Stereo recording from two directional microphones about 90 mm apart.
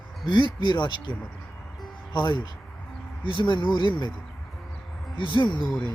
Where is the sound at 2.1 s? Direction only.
60° left (ahead or behind).